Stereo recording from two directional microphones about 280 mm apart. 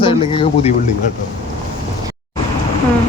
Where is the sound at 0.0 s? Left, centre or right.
Centre.